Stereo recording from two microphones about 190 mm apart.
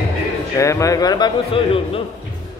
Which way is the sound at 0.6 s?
15° left (ahead or behind).